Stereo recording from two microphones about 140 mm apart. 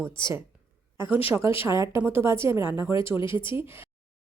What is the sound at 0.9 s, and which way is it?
Speech, 15° right (ahead or behind).